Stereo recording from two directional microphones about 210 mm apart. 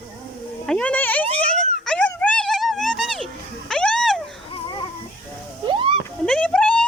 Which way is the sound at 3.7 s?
5° left (ahead or behind).